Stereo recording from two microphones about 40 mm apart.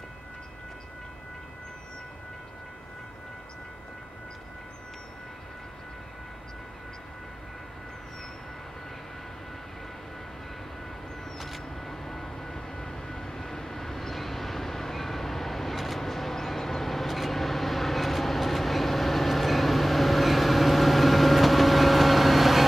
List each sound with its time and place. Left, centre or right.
11.3 s vehicle: centre